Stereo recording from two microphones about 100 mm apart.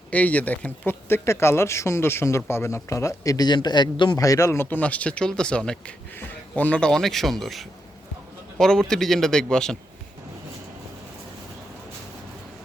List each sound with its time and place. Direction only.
0.1 s speech: 15° left (ahead or behind); by 4.2 s 50° left (ahead or behind)
4.2 s speech: 35° left (ahead or behind); by 9.7 s 5° left (ahead or behind)